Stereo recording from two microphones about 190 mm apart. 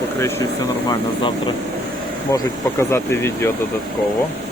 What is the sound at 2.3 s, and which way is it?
Speech, 15° left (ahead or behind).